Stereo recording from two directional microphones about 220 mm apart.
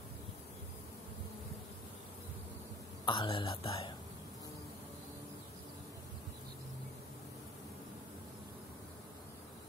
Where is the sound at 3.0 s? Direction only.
25° left (ahead or behind).